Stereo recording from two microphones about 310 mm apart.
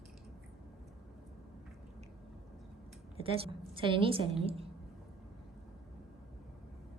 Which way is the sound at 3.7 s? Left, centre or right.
Centre.